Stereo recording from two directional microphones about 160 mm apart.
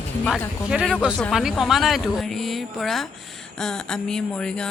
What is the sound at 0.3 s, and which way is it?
Speech, centre (ahead or behind).